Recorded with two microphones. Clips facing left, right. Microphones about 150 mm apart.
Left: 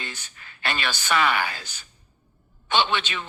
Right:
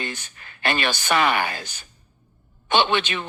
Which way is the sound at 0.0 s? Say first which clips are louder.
Right 6 dB; 55° right (ahead or behind).